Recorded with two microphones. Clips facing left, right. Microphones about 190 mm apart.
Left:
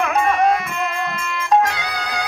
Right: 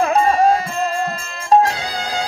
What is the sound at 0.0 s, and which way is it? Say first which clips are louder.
Music: right 3 dB; 30° right (ahead or behind).